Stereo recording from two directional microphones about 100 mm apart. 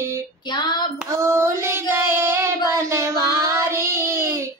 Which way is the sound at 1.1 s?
25° right (ahead or behind).